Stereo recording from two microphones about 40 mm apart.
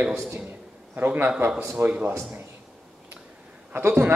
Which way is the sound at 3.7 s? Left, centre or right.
Right.